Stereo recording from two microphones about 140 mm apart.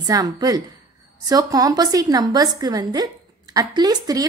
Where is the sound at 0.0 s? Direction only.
25° right (ahead or behind).